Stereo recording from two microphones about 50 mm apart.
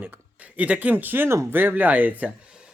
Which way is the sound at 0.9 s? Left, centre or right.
Right.